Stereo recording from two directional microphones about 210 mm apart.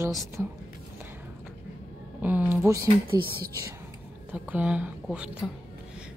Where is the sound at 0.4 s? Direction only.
10° right (ahead or behind).